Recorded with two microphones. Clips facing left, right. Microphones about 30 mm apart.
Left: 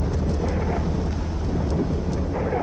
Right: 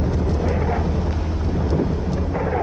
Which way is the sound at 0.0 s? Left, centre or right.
Centre.